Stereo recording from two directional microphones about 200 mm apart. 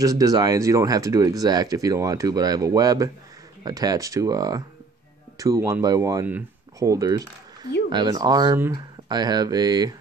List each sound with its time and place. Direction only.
0.0 s speech: 15° right (ahead or behind)